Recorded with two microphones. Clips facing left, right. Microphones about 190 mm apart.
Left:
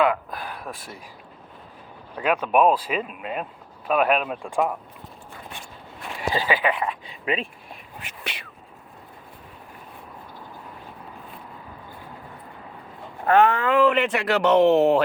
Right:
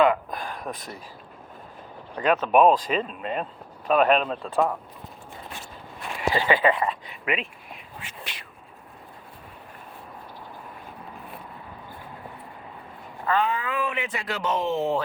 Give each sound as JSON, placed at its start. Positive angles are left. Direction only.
{"t": 0.0, "sound": "a sound", "side_deg": 5}
{"t": 2.1, "sound": "speech", "side_deg": 10}
{"t": 6.6, "sound": "speech", "side_deg": 0}
{"t": 7.3, "sound": "speech", "side_deg": 30}
{"t": 8.2, "sound": "a sound", "side_deg": 70}
{"t": 13.2, "sound": "speech", "side_deg": 75}